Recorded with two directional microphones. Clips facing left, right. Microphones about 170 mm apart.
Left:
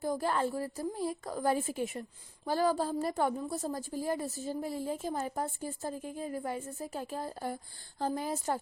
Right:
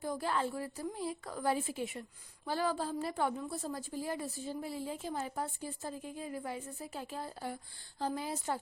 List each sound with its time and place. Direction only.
0.0 s a woman's voice: 45° left (ahead or behind)